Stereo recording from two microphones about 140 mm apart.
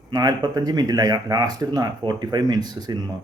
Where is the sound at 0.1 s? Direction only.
30° right (ahead or behind).